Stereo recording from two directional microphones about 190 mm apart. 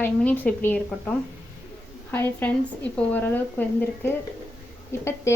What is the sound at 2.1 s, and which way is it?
Speech, 10° left (ahead or behind).